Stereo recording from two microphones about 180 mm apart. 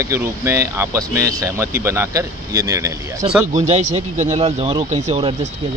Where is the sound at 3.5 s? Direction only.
40° right (ahead or behind).